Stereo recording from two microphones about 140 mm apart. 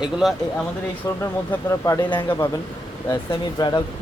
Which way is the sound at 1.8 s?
25° left (ahead or behind).